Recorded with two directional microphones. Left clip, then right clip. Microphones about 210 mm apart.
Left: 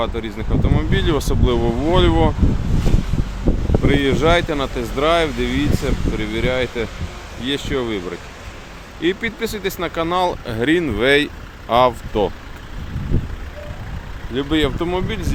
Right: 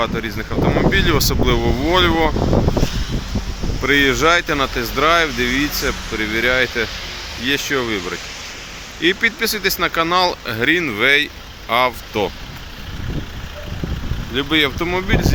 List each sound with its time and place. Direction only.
0.0 s speech: centre (ahead or behind)
3.8 s speech: 5° left (ahead or behind); by 12.3 s 20° left (ahead or behind)
14.3 s speech: 10° left (ahead or behind)